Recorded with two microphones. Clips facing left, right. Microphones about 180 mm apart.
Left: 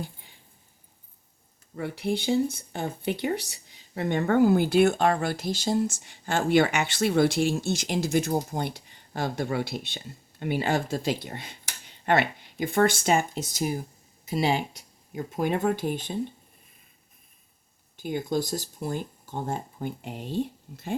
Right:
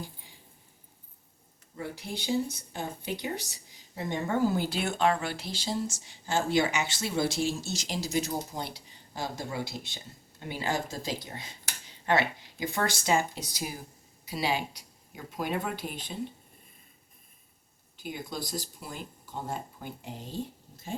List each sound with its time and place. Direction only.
0.0 s a sound: 60° left (ahead or behind)
1.7 s speech: 65° left (ahead or behind)
18.1 s speech: 50° left (ahead or behind); by 20.9 s 65° left (ahead or behind)